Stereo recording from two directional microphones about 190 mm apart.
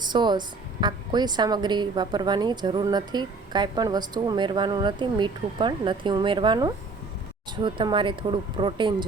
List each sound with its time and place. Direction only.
0.0 s a woman's voice: 25° right (ahead or behind)